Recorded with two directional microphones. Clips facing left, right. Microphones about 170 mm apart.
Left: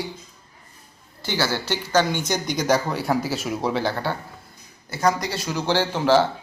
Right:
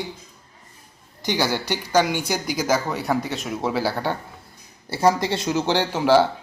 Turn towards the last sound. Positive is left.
turn(degrees=-15)  # may be behind; listen again after turning